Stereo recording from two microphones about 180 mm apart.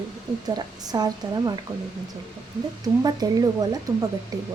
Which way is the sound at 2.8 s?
20° right (ahead or behind).